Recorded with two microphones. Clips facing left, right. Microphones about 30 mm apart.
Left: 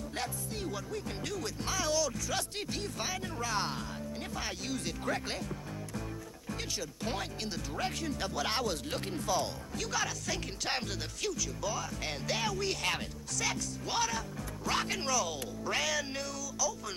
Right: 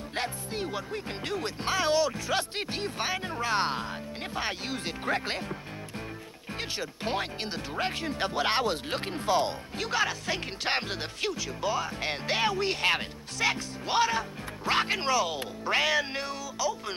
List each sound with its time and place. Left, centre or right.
0.1 s speech: right